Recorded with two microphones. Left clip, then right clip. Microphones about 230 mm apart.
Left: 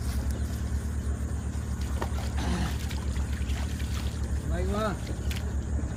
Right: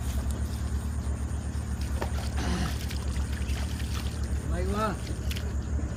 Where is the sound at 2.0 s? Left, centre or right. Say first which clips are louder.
Even; centre.